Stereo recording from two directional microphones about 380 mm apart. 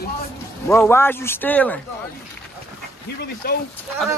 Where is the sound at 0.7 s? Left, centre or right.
Centre.